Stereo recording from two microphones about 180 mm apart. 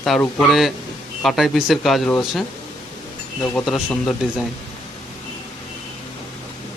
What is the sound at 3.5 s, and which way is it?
Speech, centre (ahead or behind).